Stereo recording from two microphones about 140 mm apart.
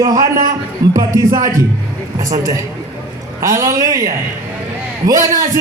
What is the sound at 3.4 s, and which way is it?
A man's voice, 20° right (ahead or behind).